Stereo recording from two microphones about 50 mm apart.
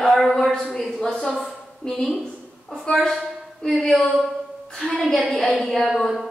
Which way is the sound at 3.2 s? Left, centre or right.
Centre.